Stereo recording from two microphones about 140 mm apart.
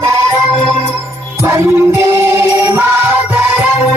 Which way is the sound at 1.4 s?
15° right (ahead or behind).